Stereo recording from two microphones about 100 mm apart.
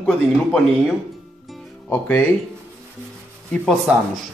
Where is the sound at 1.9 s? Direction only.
15° left (ahead or behind).